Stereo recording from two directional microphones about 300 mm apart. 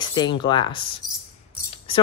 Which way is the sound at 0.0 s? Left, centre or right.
Centre.